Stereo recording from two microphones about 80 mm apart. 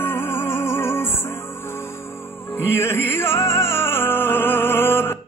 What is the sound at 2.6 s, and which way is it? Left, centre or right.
Music, left.